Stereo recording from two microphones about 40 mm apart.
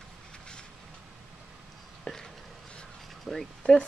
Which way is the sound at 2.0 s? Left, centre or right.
Centre.